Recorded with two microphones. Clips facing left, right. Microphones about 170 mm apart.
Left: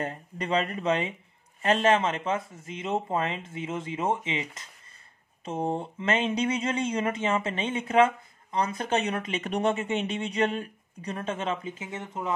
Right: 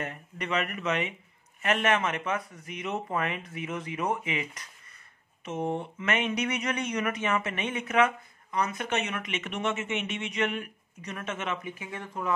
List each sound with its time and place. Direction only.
0.0 s speech: 30° left (ahead or behind)